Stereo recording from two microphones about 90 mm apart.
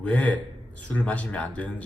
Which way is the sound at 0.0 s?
15° left (ahead or behind).